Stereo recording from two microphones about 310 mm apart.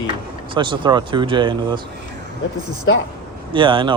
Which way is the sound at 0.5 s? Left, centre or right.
Centre.